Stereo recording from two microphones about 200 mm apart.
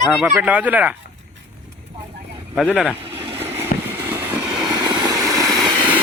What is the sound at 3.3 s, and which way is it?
Vehicle, 10° right (ahead or behind).